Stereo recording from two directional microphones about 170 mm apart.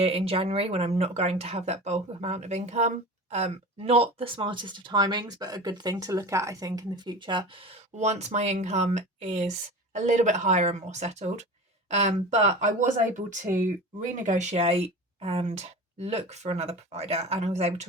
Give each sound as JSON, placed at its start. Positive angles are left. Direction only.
{"t": 0.0, "sound": "speech", "side_deg": -35}